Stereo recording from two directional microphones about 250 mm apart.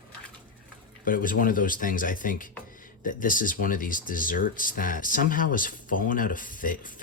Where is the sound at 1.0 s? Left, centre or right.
Left.